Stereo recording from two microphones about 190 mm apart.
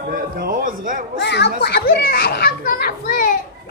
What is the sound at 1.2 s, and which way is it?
A child's voice, 65° left (ahead or behind).